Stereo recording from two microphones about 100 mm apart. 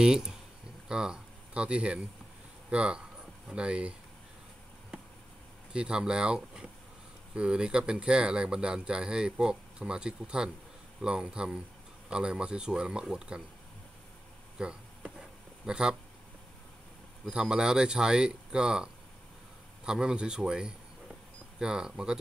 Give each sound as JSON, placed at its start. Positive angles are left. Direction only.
{"t": 0.0, "sound": "speech", "side_deg": -5}
{"t": 5.7, "sound": "speech", "side_deg": -10}
{"t": 14.6, "sound": "a sound", "side_deg": -10}
{"t": 17.3, "sound": "speech", "side_deg": -10}